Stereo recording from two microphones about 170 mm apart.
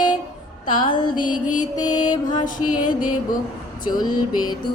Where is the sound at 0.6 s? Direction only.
55° left (ahead or behind).